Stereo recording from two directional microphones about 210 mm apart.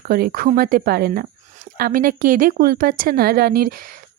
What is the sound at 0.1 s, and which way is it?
A woman's voice, 45° right (ahead or behind).